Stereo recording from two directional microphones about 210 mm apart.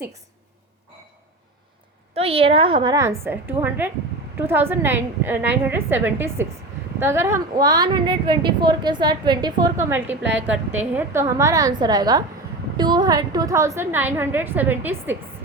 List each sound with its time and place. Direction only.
2.1 s a woman's voice: 25° right (ahead or behind); by 15.2 s 10° right (ahead or behind)